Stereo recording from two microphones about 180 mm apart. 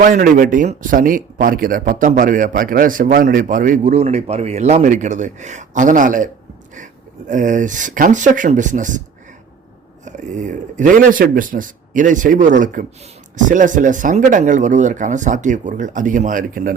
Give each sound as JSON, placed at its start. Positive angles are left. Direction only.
{"t": 0.0, "sound": "speech", "side_deg": -50}
{"t": 10.1, "sound": "speech", "side_deg": -45}